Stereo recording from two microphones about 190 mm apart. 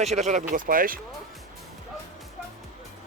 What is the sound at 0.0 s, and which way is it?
Speech, 35° right (ahead or behind).